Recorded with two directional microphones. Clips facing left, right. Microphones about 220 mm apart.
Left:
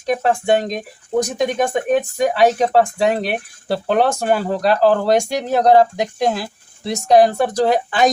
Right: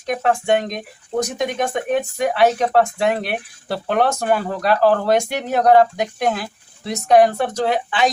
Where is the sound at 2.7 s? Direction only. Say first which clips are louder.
Left 2 dB; 35° left (ahead or behind).